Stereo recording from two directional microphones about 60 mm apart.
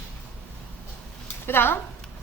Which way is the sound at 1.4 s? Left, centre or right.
Left.